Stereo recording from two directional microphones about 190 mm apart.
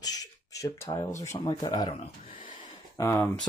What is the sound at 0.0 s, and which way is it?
Speech, 20° left (ahead or behind).